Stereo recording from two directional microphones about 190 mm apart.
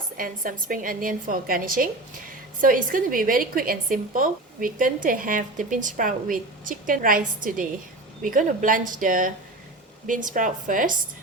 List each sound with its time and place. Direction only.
0.2 s a woman's voice: 45° right (ahead or behind)